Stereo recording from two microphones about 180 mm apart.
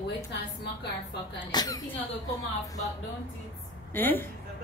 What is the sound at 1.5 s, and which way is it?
Speech, 20° left (ahead or behind).